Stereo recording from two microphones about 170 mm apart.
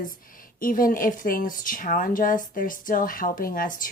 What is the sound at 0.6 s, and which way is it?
Speech, 55° left (ahead or behind).